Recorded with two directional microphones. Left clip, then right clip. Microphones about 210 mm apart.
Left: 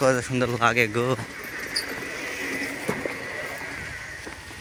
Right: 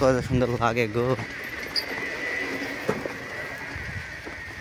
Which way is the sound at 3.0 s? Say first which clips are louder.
Left 2 dB; 35° left (ahead or behind).